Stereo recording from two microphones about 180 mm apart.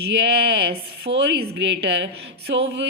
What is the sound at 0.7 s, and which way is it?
Speech, 60° right (ahead or behind).